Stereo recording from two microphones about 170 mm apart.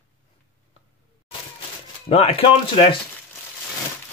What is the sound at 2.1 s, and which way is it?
Speech, 35° left (ahead or behind).